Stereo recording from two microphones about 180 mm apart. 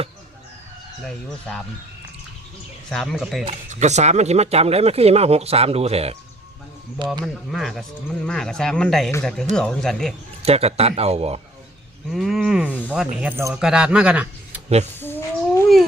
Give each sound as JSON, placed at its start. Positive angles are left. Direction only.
{"t": 1.0, "sound": "speech", "side_deg": 5}
{"t": 2.9, "sound": "speech", "side_deg": 0}
{"t": 3.7, "sound": "speech", "side_deg": -40}
{"t": 7.5, "sound": "speech", "side_deg": 0}
{"t": 10.4, "sound": "speech", "side_deg": -35}
{"t": 12.1, "sound": "a man's voice", "side_deg": 0}
{"t": 14.9, "sound": "a sound", "side_deg": 10}